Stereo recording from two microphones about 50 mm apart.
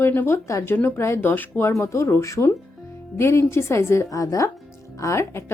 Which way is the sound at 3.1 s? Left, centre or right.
Left.